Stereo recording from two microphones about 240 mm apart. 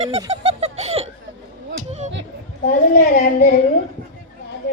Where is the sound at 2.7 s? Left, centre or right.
Left.